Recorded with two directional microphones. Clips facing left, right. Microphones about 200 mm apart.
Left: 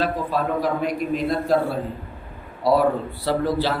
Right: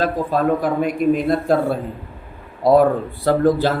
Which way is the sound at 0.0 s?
50° right (ahead or behind).